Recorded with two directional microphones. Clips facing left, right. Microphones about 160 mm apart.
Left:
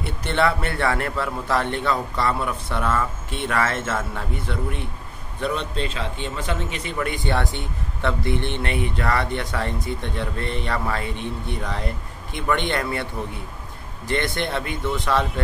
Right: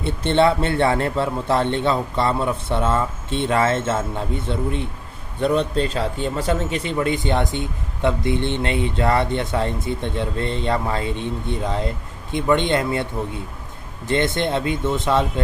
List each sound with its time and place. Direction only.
0.0 s speech: 25° right (ahead or behind)
5.4 s speech: 35° right (ahead or behind); by 15.4 s 20° right (ahead or behind)